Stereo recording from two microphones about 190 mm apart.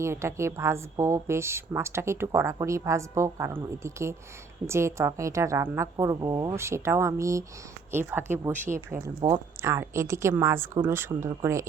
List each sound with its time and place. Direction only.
0.0 s a woman's voice: 15° right (ahead or behind)